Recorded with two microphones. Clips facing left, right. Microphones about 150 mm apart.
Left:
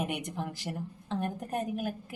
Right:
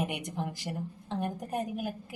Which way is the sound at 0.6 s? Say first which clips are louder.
Right 1 dB; 15° right (ahead or behind).